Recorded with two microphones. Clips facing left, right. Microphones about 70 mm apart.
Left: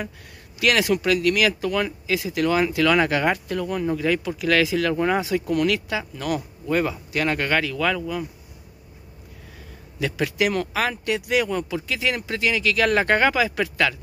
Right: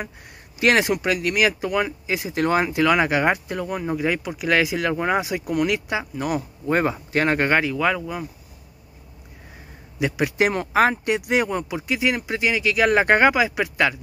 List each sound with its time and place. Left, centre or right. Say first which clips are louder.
0.6 s speech: right 2 dB; right
6.7 s speech: right 2 dB; right
9.9 s speech: right 2 dB; centre